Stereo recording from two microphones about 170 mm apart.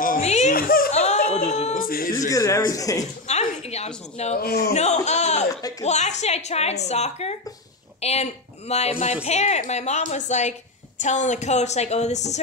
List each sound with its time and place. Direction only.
0.2 s giggle: 40° left (ahead or behind)
0.6 s whimper: 60° left (ahead or behind)
0.9 s a sound: 40° left (ahead or behind)
1.9 s a sound: 60° left (ahead or behind)
2.1 s a man's voice: 20° left (ahead or behind)
3.3 s a woman's voice: 40° left (ahead or behind)
4.4 s speech: 65° left (ahead or behind)
4.7 s a woman's voice: 40° left (ahead or behind)